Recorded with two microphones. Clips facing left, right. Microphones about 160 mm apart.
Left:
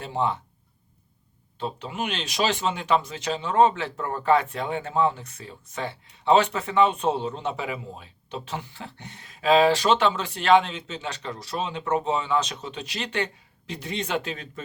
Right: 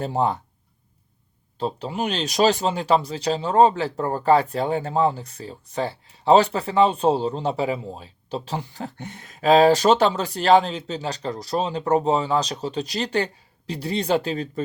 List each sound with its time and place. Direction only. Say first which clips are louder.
0.0 s speech: right 4 dB; 40° right (ahead or behind)
1.5 s speech: right 5 dB; 35° right (ahead or behind)